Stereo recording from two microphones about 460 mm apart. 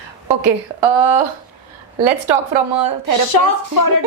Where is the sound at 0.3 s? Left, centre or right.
Right.